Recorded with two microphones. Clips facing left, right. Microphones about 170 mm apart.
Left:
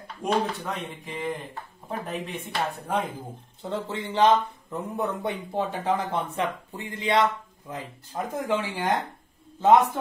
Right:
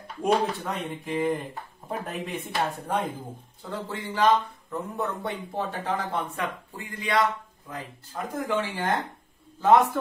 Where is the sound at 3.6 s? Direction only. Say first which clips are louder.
Left 4 dB; 25° left (ahead or behind).